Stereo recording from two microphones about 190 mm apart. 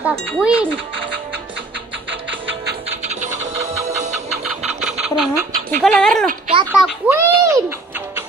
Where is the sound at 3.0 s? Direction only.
35° right (ahead or behind).